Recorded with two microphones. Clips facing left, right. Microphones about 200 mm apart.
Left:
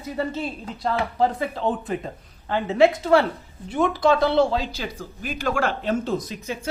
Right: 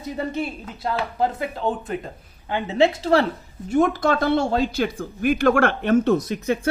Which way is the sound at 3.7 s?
45° right (ahead or behind).